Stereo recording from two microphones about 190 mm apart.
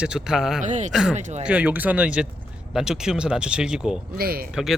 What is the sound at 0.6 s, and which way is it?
Speech, 40° right (ahead or behind).